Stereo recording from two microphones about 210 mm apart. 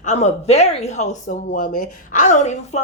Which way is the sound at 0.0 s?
35° left (ahead or behind).